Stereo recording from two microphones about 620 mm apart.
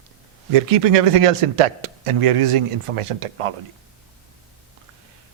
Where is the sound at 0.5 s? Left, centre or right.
Right.